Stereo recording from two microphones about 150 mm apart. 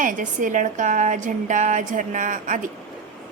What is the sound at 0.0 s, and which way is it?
A woman's voice, 60° right (ahead or behind).